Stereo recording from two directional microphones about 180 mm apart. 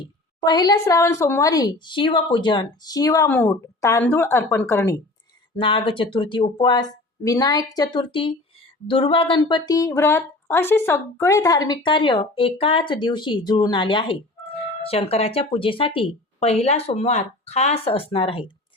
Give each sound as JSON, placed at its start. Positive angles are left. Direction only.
{"t": 0.0, "sound": "speech", "side_deg": 20}
{"t": 5.5, "sound": "speech", "side_deg": 30}